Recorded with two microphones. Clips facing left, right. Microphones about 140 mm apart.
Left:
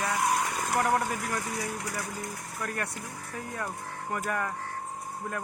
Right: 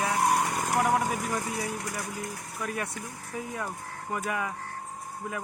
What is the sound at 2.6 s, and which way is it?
Speech, 10° right (ahead or behind).